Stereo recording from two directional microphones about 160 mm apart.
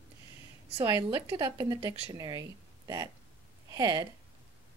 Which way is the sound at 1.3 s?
25° right (ahead or behind).